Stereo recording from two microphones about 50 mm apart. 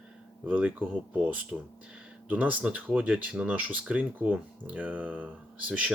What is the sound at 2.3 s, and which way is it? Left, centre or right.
Speech, right.